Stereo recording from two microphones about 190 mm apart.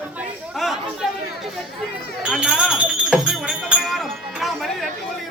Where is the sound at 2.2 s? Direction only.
5° right (ahead or behind).